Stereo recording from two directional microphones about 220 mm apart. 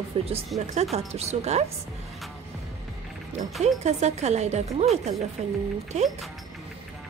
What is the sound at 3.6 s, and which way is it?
Speech, 30° right (ahead or behind).